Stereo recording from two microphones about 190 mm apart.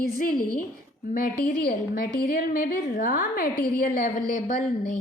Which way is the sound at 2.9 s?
45° left (ahead or behind).